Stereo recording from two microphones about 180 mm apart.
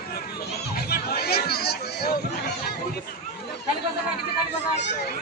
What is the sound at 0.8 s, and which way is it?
Chatter, 60° left (ahead or behind).